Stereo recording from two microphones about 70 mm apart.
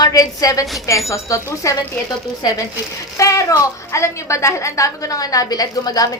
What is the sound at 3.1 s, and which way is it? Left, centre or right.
A woman's voice, left.